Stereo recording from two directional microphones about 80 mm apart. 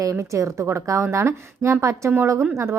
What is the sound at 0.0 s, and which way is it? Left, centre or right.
A woman's voice, right.